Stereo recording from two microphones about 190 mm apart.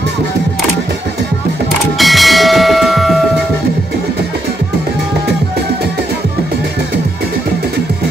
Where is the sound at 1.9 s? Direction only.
Centre (ahead or behind).